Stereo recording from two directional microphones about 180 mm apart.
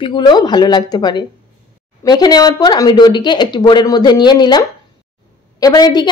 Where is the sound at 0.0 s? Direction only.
25° left (ahead or behind).